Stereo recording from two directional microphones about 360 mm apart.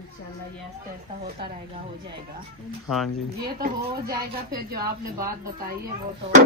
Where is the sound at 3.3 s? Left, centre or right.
Right.